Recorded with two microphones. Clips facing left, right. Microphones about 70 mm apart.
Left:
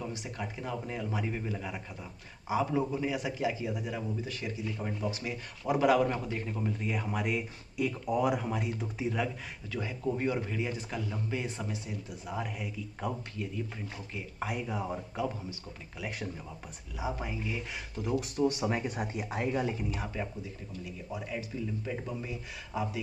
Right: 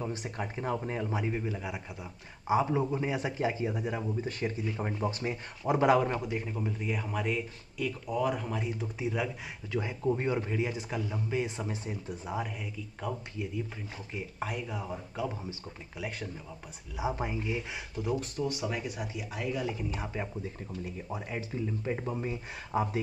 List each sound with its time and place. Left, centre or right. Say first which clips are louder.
0.1 s a man's voice: right 3 dB; right
1.2 s speech: right 2 dB; centre
2.4 s a man's voice: right 2 dB; right; by 9.3 s centre
9.7 s a man's voice: right 3 dB; right
12.4 s a man's voice: left 1 dB; centre
13.4 s speech: even; centre
14.4 s a man's voice: left 3 dB; centre
16.9 s a man's voice: right 3 dB; centre
17.5 s speech: right 2 dB; centre
18.4 s speech: left 4 dB; left
18.9 s speech: left 3 dB; left
19.9 s a man's voice: even; centre
20.4 s speech: right 3 dB; right